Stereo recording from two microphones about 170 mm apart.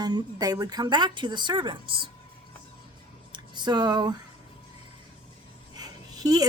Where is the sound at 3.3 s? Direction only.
25° right (ahead or behind).